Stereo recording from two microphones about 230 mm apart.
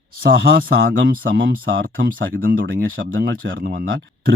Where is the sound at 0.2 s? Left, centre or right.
Right.